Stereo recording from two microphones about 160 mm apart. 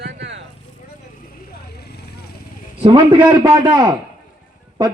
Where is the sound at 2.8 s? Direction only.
30° right (ahead or behind).